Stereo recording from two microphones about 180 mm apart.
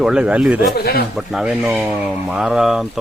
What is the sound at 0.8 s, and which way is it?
Speech, 60° left (ahead or behind).